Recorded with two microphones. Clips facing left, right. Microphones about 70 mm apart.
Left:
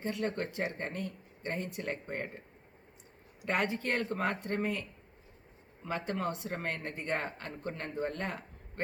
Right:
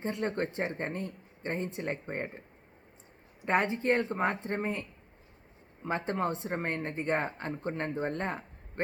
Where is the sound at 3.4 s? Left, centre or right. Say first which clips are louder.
Right 5 dB; right.